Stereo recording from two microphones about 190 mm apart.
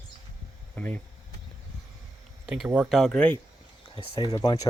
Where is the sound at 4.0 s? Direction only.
25° left (ahead or behind).